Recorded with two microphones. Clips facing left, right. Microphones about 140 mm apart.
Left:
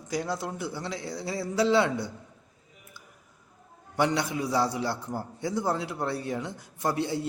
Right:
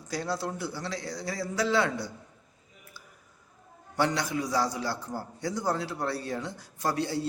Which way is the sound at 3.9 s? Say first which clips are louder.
Left 1 dB; 20° left (ahead or behind).